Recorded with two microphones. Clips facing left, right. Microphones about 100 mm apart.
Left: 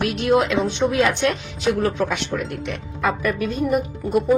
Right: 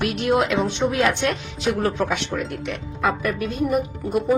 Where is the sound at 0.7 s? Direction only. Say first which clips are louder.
Left 1 dB; centre (ahead or behind).